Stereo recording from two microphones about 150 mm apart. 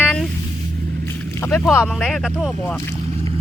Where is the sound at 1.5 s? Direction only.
15° left (ahead or behind).